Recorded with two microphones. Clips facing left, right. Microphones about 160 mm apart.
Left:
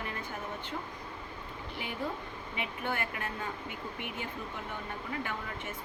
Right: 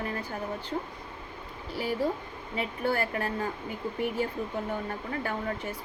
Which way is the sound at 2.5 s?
35° right (ahead or behind).